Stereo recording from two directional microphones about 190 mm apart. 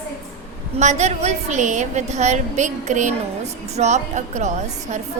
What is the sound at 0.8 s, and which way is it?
A woman's voice, 35° right (ahead or behind).